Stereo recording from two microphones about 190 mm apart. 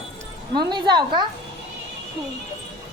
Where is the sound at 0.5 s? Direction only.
25° right (ahead or behind).